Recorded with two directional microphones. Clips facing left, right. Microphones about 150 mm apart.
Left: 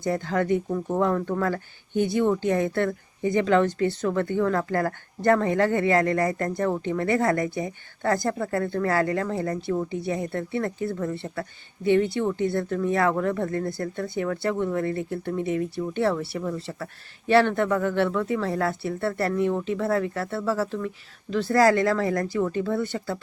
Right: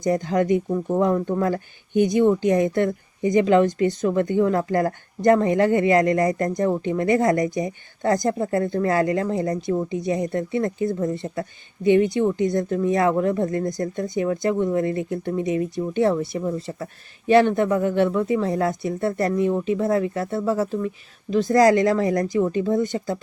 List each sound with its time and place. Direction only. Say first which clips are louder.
0.0 s speech: right 4 dB; 15° right (ahead or behind)